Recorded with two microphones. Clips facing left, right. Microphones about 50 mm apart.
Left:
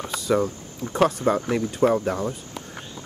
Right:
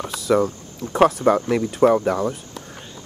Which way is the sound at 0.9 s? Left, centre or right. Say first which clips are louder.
Right 4 dB; centre.